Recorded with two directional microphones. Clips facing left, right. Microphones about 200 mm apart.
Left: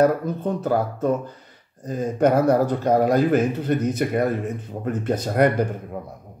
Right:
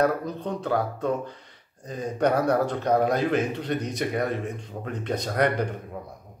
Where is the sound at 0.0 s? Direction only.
5° left (ahead or behind).